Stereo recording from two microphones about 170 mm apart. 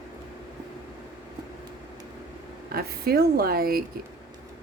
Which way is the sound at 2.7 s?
65° right (ahead or behind).